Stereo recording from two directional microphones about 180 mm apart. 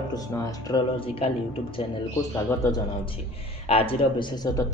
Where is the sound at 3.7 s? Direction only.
30° left (ahead or behind).